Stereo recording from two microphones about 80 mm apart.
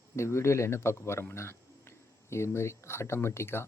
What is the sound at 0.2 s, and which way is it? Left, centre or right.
Speech, left.